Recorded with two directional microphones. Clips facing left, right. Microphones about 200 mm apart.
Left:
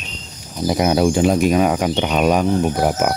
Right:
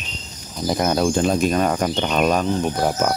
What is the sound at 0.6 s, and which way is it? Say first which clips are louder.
Speech: left 3 dB; 10° left (ahead or behind).